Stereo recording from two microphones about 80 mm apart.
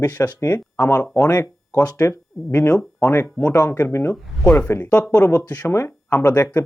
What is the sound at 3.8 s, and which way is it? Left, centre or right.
Speech, left.